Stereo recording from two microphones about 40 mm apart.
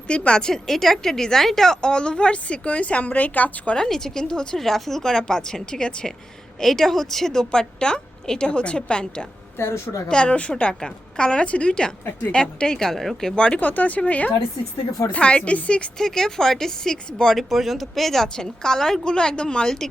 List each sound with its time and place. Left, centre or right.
0.1 s a woman's voice: left
0.7 s a woman's voice: centre; by 3.8 s left
3.8 s a woman's voice: centre
9.6 s a woman's voice: left
10.1 s a woman's voice: left
11.4 s a woman's voice: left; by 13.3 s centre
13.3 s a woman's voice: left
13.6 s speech: left
15.1 s a woman's voice: left
16.0 s a woman's voice: centre
17.3 s a woman's voice: centre
19.0 s a woman's voice: left
19.6 s a woman's voice: centre